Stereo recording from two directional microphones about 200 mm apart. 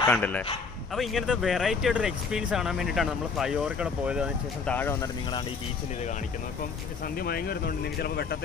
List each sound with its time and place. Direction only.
0.1 s speech: 5° left (ahead or behind)
4.6 s speech: 10° left (ahead or behind)
7.2 s speech: 50° left (ahead or behind)